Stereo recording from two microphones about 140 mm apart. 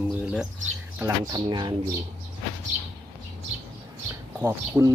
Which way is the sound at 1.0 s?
30° right (ahead or behind).